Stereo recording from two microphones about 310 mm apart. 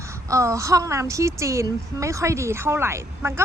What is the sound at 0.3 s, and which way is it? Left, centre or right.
A woman's voice, centre.